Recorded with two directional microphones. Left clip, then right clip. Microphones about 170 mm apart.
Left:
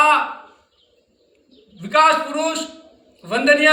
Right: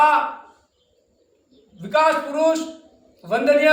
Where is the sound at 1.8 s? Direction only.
15° right (ahead or behind).